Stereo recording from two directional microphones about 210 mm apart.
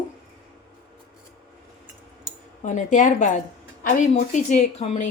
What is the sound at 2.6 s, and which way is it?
Speech, 35° left (ahead or behind).